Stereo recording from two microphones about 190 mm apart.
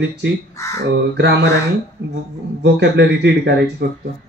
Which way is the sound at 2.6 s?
65° right (ahead or behind).